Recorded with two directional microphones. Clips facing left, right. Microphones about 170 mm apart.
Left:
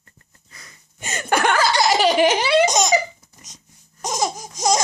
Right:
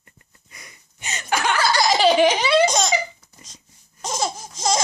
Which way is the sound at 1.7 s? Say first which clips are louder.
Right 4 dB; 15° left (ahead or behind).